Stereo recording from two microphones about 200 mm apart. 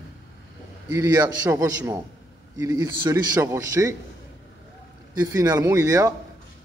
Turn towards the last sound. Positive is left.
turn(degrees=-15)  # may be behind; listen again after turning